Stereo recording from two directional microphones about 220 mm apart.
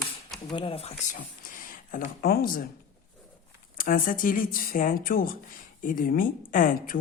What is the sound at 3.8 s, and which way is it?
Speech, 40° left (ahead or behind).